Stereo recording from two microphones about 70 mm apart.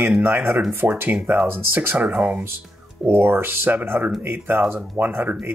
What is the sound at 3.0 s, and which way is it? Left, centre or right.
Speech, right.